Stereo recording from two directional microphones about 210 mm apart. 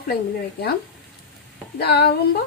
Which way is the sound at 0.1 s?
50° left (ahead or behind).